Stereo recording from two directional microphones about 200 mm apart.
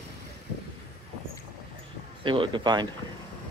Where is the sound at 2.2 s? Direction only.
25° right (ahead or behind).